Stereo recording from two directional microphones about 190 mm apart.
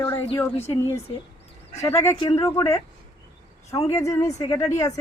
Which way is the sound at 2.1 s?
25° left (ahead or behind).